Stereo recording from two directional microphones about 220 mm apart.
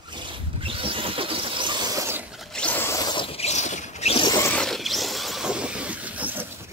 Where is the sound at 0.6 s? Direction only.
25° right (ahead or behind).